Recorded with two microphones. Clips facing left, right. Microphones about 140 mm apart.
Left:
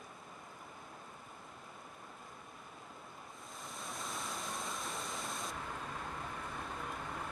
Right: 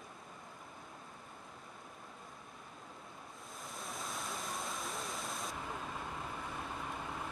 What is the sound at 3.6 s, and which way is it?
Waterfall, centre (ahead or behind).